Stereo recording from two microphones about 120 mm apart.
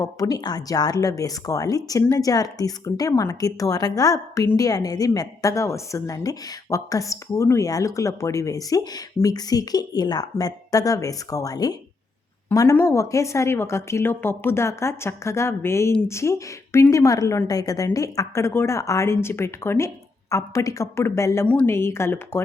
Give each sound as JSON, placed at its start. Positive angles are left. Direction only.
{"t": 0.0, "sound": "speech", "side_deg": 30}
{"t": 21.4, "sound": "a woman's voice", "side_deg": 10}
{"t": 21.7, "sound": "speech", "side_deg": 20}